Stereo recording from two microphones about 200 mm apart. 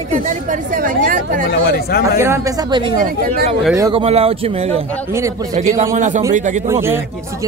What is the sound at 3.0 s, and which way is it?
Speech, 45° right (ahead or behind).